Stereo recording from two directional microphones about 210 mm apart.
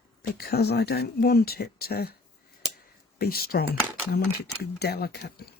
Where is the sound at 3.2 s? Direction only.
45° left (ahead or behind).